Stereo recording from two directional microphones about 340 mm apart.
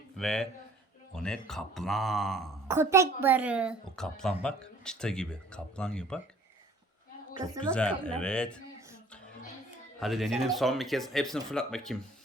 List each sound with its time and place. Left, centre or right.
0.2 s speech: centre
7.6 s speech: centre
10.0 s speech: centre